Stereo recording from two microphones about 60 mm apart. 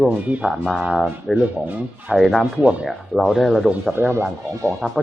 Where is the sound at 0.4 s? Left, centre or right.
Centre.